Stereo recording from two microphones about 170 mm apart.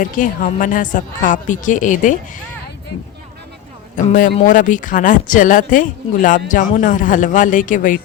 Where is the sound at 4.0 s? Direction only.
50° left (ahead or behind).